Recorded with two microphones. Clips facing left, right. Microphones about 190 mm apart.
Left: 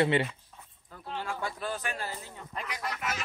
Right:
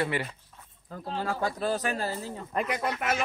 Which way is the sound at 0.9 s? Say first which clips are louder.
Right 5 dB; 35° right (ahead or behind).